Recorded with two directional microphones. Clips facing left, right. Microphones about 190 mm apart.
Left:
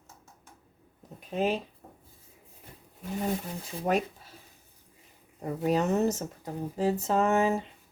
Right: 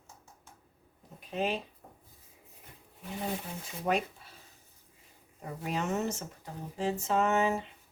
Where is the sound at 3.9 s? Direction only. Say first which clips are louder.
Left 3 dB; 45° left (ahead or behind).